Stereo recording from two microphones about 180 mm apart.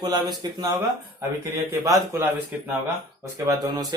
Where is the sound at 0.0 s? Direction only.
20° right (ahead or behind).